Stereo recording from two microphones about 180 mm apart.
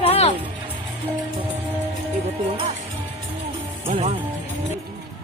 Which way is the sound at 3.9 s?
35° right (ahead or behind).